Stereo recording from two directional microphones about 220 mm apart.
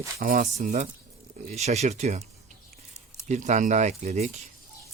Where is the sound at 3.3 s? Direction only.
35° right (ahead or behind).